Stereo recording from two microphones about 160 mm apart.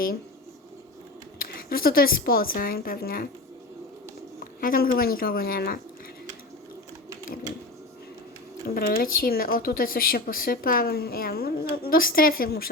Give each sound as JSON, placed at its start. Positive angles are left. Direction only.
{"t": 1.4, "sound": "a woman's voice", "side_deg": 70}
{"t": 4.6, "sound": "a woman's voice", "side_deg": 65}
{"t": 8.6, "sound": "a woman's voice", "side_deg": 65}
{"t": 11.8, "sound": "a woman's voice", "side_deg": 65}